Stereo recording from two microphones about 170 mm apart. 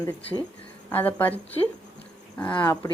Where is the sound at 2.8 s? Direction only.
20° left (ahead or behind).